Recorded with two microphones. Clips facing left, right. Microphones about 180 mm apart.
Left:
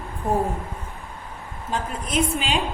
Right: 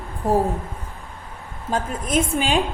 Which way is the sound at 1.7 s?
45° right (ahead or behind).